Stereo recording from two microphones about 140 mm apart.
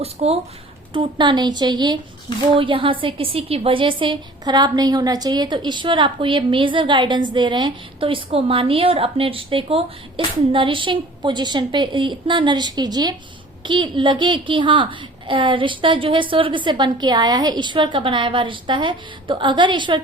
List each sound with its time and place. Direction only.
0.0 s speech: 45° right (ahead or behind)
0.9 s a woman's voice: 35° right (ahead or behind)